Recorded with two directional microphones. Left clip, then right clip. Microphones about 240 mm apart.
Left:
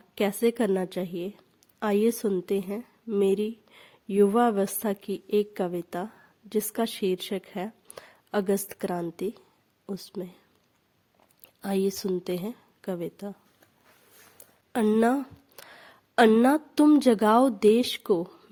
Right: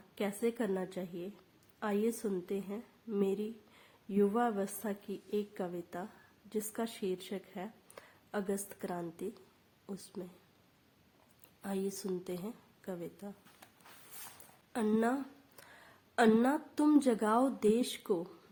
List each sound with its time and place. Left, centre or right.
0.1 s a woman's voice: left
11.6 s a woman's voice: left
14.7 s a woman's voice: left